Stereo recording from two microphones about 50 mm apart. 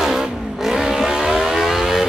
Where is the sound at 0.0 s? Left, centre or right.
Centre.